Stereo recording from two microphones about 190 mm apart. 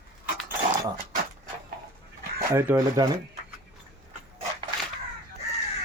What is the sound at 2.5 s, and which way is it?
Speech, 15° right (ahead or behind).